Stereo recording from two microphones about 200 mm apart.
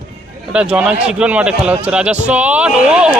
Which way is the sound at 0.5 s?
5° right (ahead or behind).